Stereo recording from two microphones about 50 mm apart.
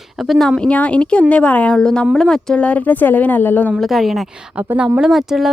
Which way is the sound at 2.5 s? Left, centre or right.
Left.